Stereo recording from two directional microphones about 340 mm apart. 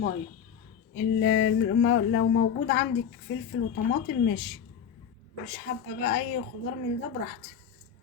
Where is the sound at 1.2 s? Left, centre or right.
Left.